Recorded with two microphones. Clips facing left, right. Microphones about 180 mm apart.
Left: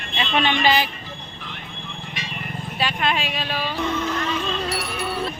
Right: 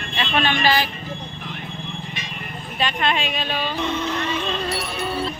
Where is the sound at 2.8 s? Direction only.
5° left (ahead or behind).